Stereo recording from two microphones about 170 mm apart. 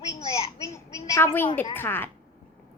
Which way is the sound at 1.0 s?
15° left (ahead or behind).